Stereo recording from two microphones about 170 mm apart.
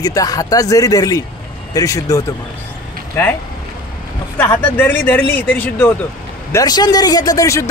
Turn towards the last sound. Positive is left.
turn(degrees=20)  # may be behind; listen again after turning